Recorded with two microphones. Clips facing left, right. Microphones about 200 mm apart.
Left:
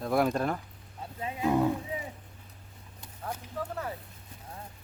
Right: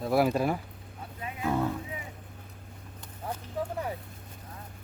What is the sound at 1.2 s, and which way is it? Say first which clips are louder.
Speech: left 3 dB; 25° left (ahead or behind).